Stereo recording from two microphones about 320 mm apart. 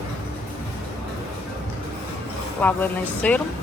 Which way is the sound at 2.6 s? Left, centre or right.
Centre.